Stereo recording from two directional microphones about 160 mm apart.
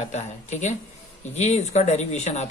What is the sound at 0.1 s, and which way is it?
Speech, 45° left (ahead or behind).